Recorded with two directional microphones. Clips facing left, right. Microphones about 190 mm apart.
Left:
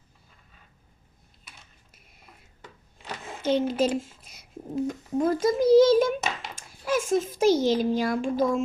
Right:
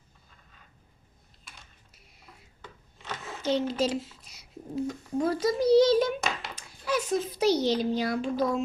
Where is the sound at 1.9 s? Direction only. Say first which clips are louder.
Left 1 dB; 50° left (ahead or behind).